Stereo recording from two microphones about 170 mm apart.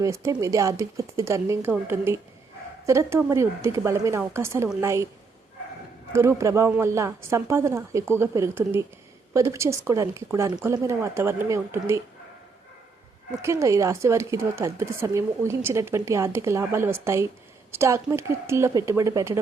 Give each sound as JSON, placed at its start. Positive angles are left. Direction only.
{"t": 0.0, "sound": "speech", "side_deg": -20}
{"t": 6.1, "sound": "speech", "side_deg": -15}
{"t": 13.3, "sound": "speech", "side_deg": -15}